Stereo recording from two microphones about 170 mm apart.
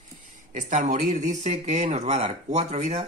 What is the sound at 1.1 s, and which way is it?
Speech, 45° right (ahead or behind).